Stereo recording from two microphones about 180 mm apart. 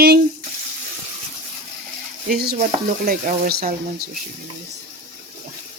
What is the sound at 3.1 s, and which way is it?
Speech, 50° right (ahead or behind).